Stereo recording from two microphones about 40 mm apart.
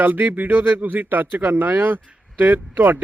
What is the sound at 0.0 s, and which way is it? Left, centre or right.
Speech, right.